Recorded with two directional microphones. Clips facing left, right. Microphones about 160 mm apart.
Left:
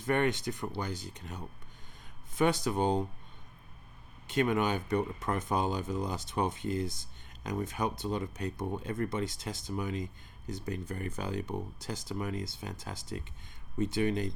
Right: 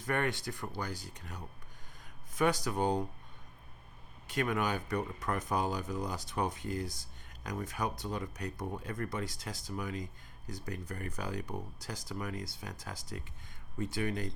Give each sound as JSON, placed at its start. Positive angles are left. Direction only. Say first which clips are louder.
{"t": 0.0, "sound": "speech", "louder": "left 4 dB", "side_deg": 20}
{"t": 4.3, "sound": "speech", "louder": "left 4 dB", "side_deg": 25}